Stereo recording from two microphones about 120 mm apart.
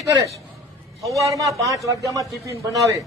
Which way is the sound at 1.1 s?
25° right (ahead or behind).